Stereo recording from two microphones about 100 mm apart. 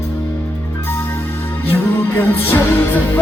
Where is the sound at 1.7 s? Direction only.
25° left (ahead or behind).